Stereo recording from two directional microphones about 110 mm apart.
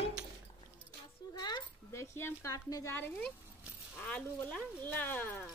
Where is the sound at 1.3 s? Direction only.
40° left (ahead or behind).